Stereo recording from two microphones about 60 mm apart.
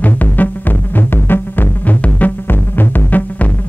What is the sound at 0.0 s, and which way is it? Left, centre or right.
Music, left.